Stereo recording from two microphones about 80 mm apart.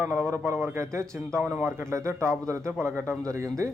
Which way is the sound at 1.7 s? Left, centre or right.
Right.